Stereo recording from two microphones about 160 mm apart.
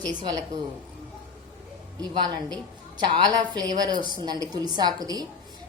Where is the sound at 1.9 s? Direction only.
30° right (ahead or behind).